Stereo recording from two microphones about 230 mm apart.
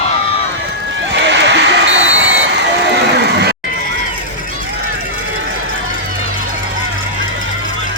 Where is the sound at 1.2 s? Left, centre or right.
Right.